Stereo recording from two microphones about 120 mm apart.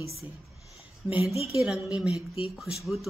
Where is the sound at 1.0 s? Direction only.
5° right (ahead or behind).